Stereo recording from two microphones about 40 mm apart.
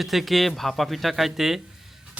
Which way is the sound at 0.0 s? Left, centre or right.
Centre.